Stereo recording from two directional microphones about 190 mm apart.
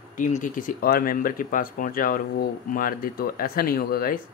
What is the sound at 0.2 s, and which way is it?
Speech, 40° left (ahead or behind).